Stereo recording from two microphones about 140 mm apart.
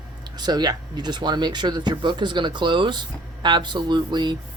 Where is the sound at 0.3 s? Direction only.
30° right (ahead or behind).